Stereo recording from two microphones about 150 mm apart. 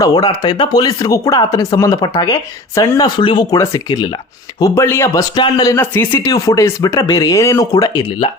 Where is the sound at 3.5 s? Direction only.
20° left (ahead or behind).